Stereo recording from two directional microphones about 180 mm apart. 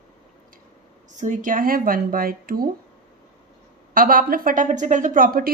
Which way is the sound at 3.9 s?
50° right (ahead or behind).